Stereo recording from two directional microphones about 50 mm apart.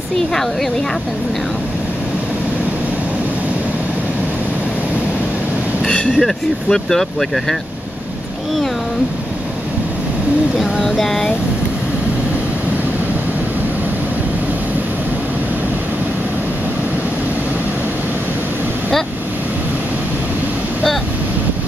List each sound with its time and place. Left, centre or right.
5.9 s a sound: centre
6.1 s speech: centre
10.8 s speech: centre